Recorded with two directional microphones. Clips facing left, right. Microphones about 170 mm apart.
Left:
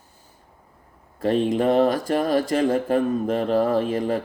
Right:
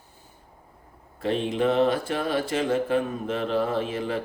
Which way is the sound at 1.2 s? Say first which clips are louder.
Left 4 dB; 40° left (ahead or behind).